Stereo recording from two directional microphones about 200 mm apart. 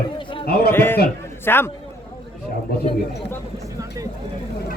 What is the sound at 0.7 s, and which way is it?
A man's voice, 10° left (ahead or behind).